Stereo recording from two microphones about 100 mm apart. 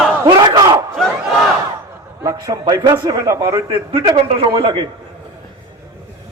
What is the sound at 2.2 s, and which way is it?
A man's voice, 35° right (ahead or behind).